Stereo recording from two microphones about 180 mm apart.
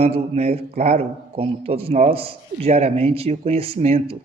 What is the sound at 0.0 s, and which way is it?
Speech, 35° right (ahead or behind).